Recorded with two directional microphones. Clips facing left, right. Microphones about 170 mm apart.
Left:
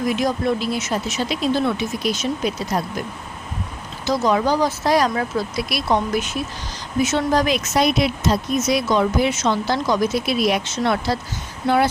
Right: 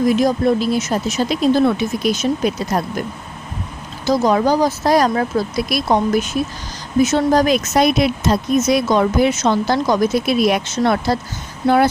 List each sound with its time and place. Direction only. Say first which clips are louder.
0.1 s speech: right 5 dB; 40° right (ahead or behind)
4.0 s speech: right 4 dB; 40° right (ahead or behind)